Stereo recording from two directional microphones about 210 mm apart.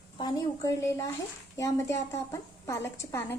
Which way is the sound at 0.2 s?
15° left (ahead or behind).